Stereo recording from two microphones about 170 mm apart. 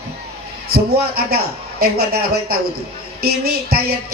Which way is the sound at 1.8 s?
65° right (ahead or behind).